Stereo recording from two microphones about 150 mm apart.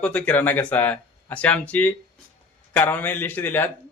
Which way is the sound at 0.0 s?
10° left (ahead or behind).